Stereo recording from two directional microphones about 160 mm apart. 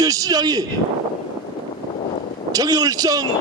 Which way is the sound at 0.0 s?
20° right (ahead or behind).